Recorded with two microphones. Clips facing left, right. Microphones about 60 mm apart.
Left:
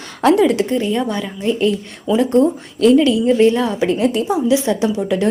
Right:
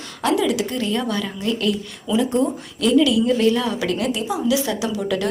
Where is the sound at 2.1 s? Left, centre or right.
Left.